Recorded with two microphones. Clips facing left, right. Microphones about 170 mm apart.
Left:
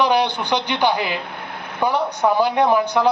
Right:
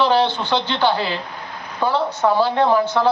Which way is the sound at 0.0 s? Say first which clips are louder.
Right 1 dB; 15° left (ahead or behind).